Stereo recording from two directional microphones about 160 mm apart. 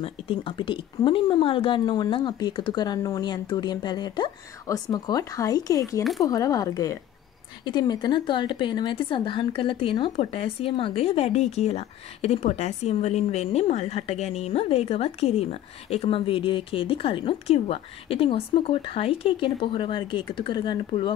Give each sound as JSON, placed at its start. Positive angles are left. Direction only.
{"t": 0.0, "sound": "a woman's voice", "side_deg": 35}